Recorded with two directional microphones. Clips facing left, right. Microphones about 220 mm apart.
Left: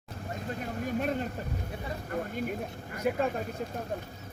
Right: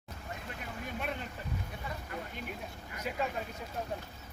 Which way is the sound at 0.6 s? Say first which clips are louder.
Left 8 dB; 40° left (ahead or behind).